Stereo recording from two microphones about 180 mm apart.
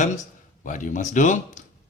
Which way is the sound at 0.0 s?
40° left (ahead or behind).